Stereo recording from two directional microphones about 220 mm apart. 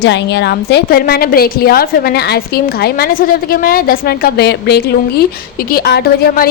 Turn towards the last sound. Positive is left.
turn(degrees=45)  # may be behind; listen again after turning